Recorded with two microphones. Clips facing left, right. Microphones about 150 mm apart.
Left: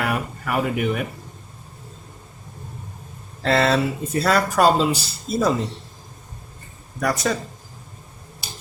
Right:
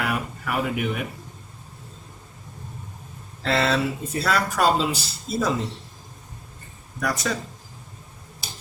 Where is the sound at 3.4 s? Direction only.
40° left (ahead or behind).